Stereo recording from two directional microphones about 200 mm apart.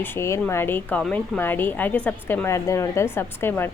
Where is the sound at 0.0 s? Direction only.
10° left (ahead or behind).